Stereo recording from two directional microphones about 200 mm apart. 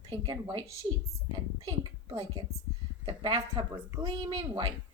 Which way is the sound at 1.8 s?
25° right (ahead or behind).